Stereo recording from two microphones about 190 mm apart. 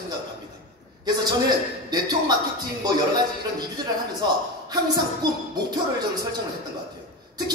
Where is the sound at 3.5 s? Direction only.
20° right (ahead or behind).